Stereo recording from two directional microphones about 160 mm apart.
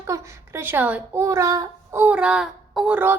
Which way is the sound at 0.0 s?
15° right (ahead or behind).